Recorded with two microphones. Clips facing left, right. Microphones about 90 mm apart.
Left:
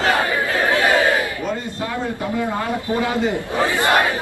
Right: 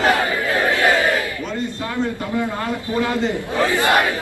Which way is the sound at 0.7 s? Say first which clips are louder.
Left 1 dB; 20° left (ahead or behind).